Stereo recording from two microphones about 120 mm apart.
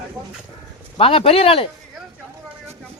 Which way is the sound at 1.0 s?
50° left (ahead or behind).